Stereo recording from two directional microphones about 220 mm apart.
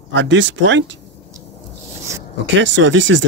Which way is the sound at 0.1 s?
55° right (ahead or behind).